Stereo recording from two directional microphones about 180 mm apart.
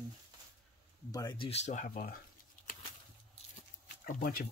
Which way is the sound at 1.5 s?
40° left (ahead or behind).